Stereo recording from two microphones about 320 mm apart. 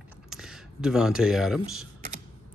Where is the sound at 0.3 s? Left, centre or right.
Centre.